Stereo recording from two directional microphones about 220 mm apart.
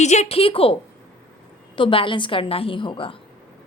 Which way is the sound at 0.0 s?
30° left (ahead or behind).